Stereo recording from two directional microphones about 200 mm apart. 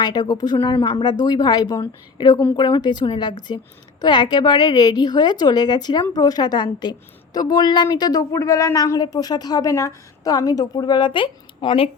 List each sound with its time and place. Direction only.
0.0 s speech: 20° left (ahead or behind)